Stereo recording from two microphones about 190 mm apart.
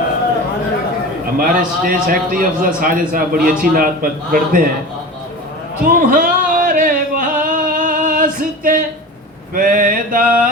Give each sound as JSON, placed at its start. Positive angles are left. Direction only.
{"t": 1.4, "sound": "a man's voice", "side_deg": -50}
{"t": 5.8, "sound": "a sound", "side_deg": -45}
{"t": 9.6, "sound": "a man's voice", "side_deg": -45}